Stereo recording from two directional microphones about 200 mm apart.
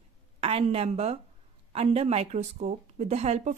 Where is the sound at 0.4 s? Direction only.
30° right (ahead or behind).